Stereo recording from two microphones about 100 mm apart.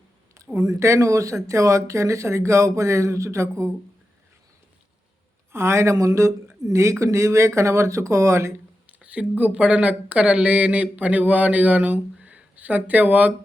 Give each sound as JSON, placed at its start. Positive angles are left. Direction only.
{"t": 0.5, "sound": "speech", "side_deg": -35}
{"t": 5.5, "sound": "speech", "side_deg": -25}
{"t": 8.9, "sound": "speech", "side_deg": -15}